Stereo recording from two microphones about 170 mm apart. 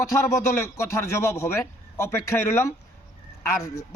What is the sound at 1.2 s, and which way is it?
Speech, 20° left (ahead or behind).